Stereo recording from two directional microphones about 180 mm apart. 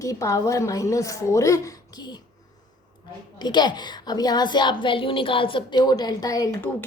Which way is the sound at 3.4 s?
25° left (ahead or behind).